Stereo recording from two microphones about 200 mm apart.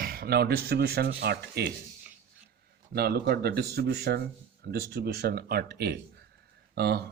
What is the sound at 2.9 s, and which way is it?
Speech, 50° right (ahead or behind).